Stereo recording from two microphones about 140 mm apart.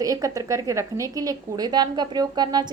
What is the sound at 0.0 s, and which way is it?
A woman's voice, 25° right (ahead or behind).